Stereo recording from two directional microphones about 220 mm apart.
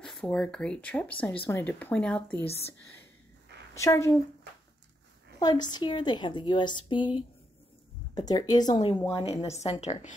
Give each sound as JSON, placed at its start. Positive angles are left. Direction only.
{"t": 0.0, "sound": "speech", "side_deg": 0}
{"t": 3.7, "sound": "speech", "side_deg": 15}
{"t": 5.4, "sound": "a woman's voice", "side_deg": 20}